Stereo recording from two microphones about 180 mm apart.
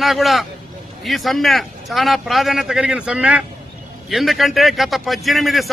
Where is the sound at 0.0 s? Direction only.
Centre (ahead or behind).